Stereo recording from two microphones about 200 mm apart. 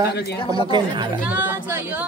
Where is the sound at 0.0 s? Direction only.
55° left (ahead or behind).